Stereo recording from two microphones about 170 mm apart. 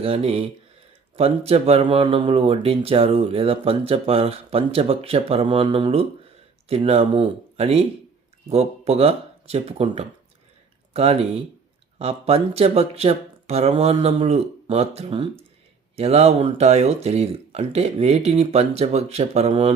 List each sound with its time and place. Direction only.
0.0 s speech: 35° right (ahead or behind)